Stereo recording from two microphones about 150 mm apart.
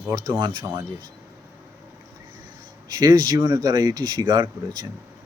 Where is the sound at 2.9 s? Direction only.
25° right (ahead or behind).